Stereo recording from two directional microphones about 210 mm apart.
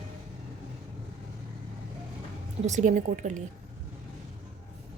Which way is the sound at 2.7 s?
35° right (ahead or behind).